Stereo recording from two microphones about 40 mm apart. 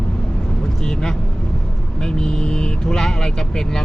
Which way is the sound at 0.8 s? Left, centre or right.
Centre.